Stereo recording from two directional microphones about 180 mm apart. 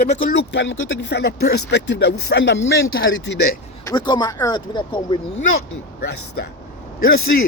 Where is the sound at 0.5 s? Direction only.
90° left; by 2.6 s 75° left (ahead or behind).